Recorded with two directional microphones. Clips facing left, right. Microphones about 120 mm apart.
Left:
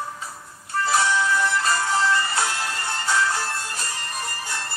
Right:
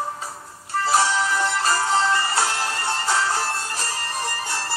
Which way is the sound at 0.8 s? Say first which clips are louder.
Right 1 dB; 30° right (ahead or behind).